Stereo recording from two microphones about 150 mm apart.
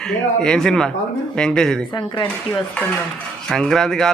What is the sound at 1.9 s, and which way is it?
Speech, 30° left (ahead or behind).